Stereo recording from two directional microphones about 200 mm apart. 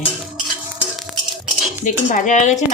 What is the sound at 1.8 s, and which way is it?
Speech, 40° left (ahead or behind).